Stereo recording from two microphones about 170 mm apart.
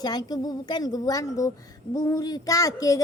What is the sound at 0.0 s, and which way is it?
A woman's voice, 25° left (ahead or behind).